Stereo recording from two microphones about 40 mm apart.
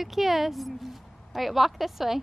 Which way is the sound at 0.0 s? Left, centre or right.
Centre.